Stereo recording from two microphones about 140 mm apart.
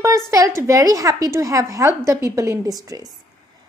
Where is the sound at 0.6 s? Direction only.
25° right (ahead or behind).